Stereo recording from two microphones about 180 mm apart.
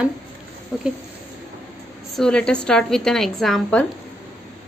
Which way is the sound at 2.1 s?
5° left (ahead or behind).